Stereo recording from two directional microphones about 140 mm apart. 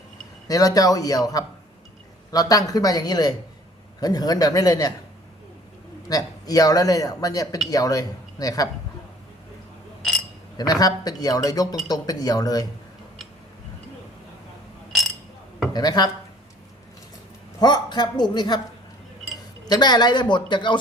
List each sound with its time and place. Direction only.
0.4 s a man's voice: 25° left (ahead or behind)
6.1 s a man's voice: 25° left (ahead or behind)
10.0 s a sound: centre (ahead or behind)
10.6 s a man's voice: 25° left (ahead or behind)
15.7 s a man's voice: 30° left (ahead or behind)
17.6 s a woman's voice: 30° left (ahead or behind)
19.6 s a woman's voice: 30° left (ahead or behind)